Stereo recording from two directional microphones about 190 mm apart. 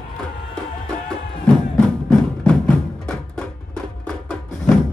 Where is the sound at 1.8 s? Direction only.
5° left (ahead or behind).